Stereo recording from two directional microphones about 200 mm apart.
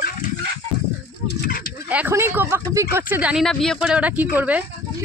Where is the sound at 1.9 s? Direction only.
10° right (ahead or behind).